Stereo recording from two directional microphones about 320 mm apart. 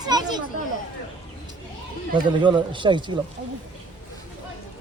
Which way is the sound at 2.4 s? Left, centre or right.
Centre.